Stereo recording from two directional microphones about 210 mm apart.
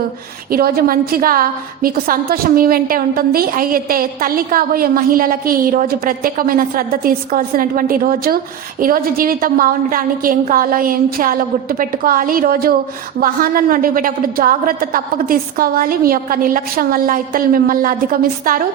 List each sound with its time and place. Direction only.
0.5 s a woman's voice: 45° right (ahead or behind)